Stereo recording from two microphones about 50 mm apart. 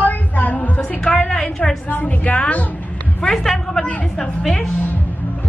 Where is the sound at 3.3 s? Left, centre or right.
Centre.